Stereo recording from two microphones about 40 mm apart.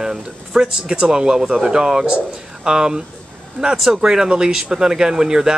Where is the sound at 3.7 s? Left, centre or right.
Centre.